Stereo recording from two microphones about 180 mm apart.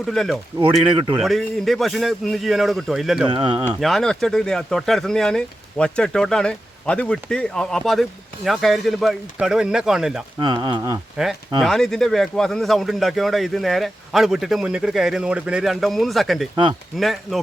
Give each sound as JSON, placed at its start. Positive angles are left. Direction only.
{"t": 0.0, "sound": "a man's voice", "side_deg": 0}
{"t": 0.6, "sound": "speech", "side_deg": -30}
{"t": 1.2, "sound": "a man's voice", "side_deg": 0}
{"t": 3.2, "sound": "speech", "side_deg": -25}
{"t": 3.8, "sound": "a man's voice", "side_deg": 0}
{"t": 10.4, "sound": "speech", "side_deg": -25}
{"t": 11.6, "sound": "a man's voice", "side_deg": 0}